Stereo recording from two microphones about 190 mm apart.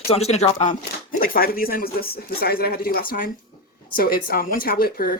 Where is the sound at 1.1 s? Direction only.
50° left (ahead or behind).